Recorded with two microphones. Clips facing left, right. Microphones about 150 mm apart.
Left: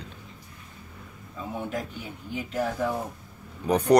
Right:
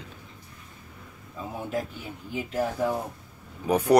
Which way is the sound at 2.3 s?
10° right (ahead or behind).